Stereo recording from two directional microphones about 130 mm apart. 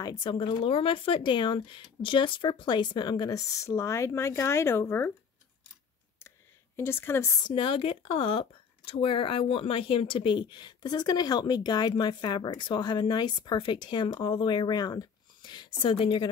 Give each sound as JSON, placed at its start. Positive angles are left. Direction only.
{"t": 0.0, "sound": "speech", "side_deg": 30}
{"t": 6.8, "sound": "a woman's voice", "side_deg": 20}
{"t": 7.4, "sound": "speech", "side_deg": 40}